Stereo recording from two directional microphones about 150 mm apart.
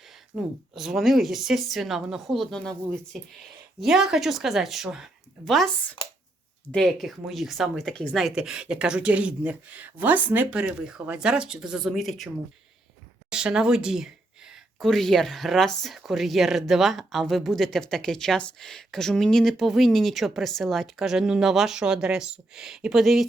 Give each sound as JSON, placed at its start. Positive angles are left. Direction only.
{"t": 0.3, "sound": "speech", "side_deg": -5}
{"t": 6.0, "sound": "speech", "side_deg": 35}
{"t": 6.7, "sound": "speech", "side_deg": 0}
{"t": 13.3, "sound": "speech", "side_deg": -5}